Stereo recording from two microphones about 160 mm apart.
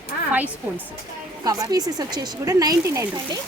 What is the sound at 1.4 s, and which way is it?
A woman's voice, 25° right (ahead or behind).